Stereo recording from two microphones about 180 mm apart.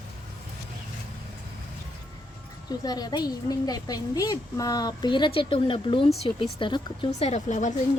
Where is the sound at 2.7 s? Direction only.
20° left (ahead or behind); by 7.7 s 40° left (ahead or behind).